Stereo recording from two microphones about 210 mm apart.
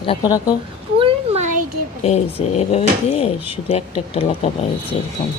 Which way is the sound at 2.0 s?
30° left (ahead or behind).